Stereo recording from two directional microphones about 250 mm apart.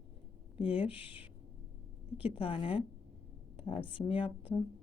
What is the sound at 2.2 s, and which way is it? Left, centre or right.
Speech, left.